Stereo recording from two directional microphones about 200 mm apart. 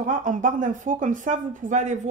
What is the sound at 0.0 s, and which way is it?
Speech, 40° right (ahead or behind).